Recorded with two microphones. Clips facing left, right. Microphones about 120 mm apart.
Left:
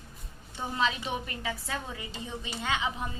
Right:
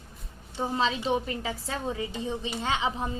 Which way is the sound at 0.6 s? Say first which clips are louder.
Right 3 dB; 30° right (ahead or behind).